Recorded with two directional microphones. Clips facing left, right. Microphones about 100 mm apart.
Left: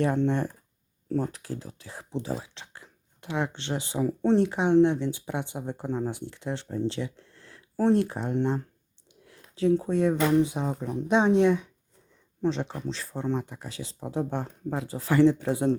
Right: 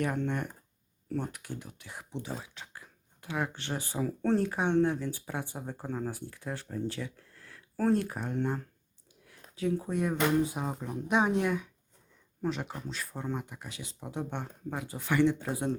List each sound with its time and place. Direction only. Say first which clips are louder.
0.0 s speech: left 7 dB; 30° left (ahead or behind)
9.2 s a sound: left 8 dB; 30° left (ahead or behind)
9.9 s speech: left 5 dB; 30° left (ahead or behind)